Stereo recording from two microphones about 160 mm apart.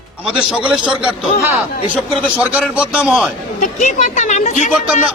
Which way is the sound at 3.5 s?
50° left (ahead or behind).